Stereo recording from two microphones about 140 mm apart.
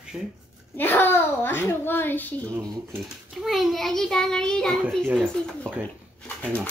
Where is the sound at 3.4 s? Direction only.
Centre (ahead or behind).